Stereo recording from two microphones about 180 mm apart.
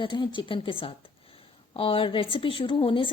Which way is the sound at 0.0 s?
25° left (ahead or behind).